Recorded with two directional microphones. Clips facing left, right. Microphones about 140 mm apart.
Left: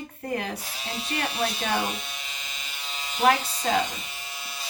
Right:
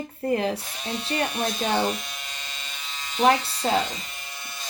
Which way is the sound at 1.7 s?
5° left (ahead or behind).